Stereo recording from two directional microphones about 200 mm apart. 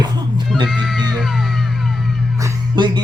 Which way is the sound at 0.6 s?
Centre (ahead or behind).